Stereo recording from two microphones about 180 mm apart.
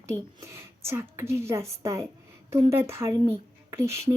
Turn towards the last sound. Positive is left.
turn(degrees=-15)  # may be behind; listen again after turning